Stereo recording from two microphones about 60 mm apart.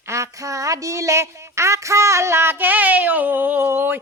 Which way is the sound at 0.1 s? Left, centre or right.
Right.